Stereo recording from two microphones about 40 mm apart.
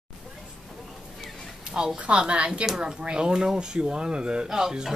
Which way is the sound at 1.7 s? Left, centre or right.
Centre.